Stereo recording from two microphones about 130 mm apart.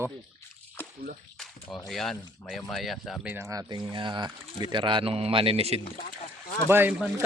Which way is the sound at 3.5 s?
30° right (ahead or behind).